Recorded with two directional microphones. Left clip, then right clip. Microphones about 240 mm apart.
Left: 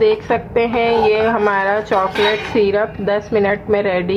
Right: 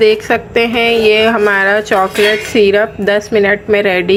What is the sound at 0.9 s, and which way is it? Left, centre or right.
Speech, centre.